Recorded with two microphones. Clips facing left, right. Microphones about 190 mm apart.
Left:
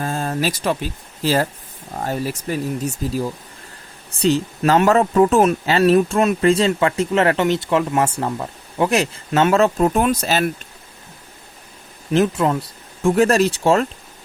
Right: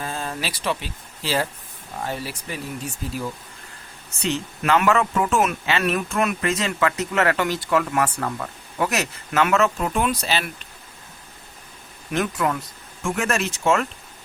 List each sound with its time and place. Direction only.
0.0 s speech: 45° left (ahead or behind)
12.1 s speech: 25° left (ahead or behind)